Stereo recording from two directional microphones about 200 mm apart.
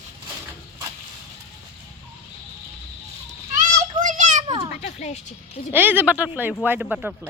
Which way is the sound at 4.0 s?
40° right (ahead or behind).